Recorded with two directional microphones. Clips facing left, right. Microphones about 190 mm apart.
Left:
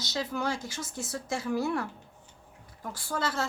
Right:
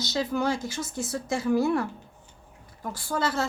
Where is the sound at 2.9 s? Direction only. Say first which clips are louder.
Right 4 dB; 15° right (ahead or behind).